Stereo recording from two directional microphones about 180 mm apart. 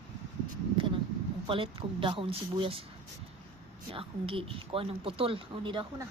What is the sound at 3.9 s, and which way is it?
A woman's voice, 30° right (ahead or behind).